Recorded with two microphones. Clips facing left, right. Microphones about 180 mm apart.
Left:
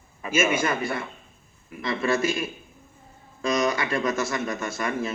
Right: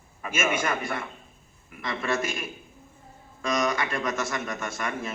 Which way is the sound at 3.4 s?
30° left (ahead or behind).